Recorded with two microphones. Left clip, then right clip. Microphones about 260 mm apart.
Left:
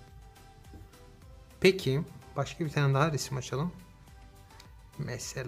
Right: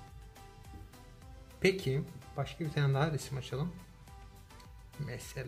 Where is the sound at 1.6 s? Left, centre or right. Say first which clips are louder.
Left 5 dB; centre.